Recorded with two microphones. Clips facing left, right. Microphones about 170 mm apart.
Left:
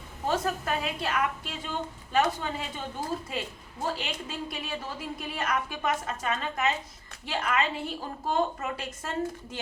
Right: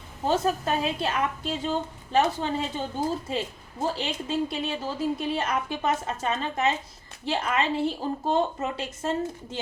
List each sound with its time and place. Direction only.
0.3 s a woman's voice: 25° right (ahead or behind)